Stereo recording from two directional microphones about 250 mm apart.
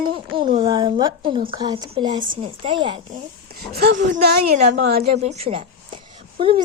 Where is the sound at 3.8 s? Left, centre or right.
Right.